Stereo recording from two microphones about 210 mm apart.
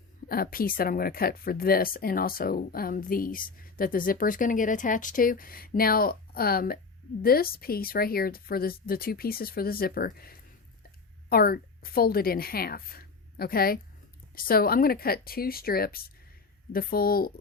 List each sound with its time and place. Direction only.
0.3 s a woman's voice: 45° left (ahead or behind)